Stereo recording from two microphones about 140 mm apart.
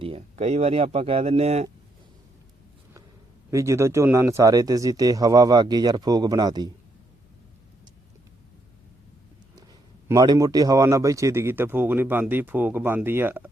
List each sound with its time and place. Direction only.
0.0 s speech: 50° right (ahead or behind)
3.5 s speech: 20° right (ahead or behind)
10.1 s speech: 25° right (ahead or behind)